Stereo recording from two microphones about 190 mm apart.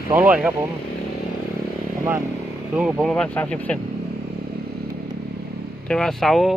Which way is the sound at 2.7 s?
5° right (ahead or behind).